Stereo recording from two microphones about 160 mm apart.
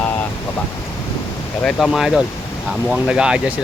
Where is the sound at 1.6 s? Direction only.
Centre (ahead or behind).